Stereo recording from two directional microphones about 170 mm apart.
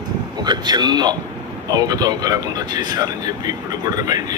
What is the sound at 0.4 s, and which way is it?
Speech, 25° right (ahead or behind).